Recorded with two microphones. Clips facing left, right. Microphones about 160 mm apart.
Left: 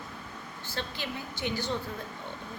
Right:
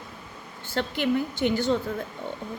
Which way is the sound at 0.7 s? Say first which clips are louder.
Right 12 dB; 55° right (ahead or behind).